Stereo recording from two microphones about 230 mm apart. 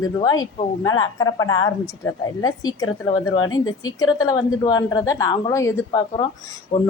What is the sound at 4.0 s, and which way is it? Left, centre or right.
A woman's voice, centre.